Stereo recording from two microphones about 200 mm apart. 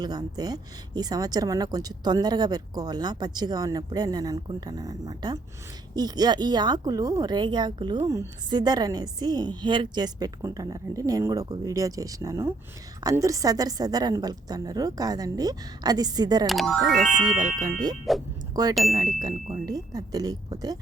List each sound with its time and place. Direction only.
0.0 s speech: 20° right (ahead or behind)
16.5 s speech: centre (ahead or behind)
17.4 s speech: 20° right (ahead or behind)